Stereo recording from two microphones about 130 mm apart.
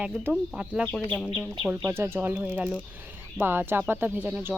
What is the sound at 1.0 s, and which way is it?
Speech, 15° left (ahead or behind).